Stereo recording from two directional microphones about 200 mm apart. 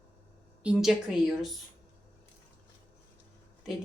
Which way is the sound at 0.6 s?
Centre (ahead or behind).